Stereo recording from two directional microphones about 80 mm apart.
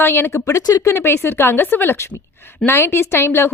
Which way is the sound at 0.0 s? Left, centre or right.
Left.